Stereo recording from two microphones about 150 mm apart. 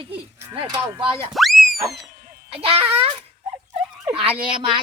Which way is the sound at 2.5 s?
40° right (ahead or behind).